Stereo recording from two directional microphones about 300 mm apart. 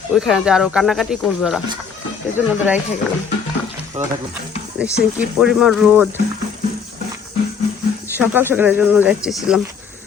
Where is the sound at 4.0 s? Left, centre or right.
Right.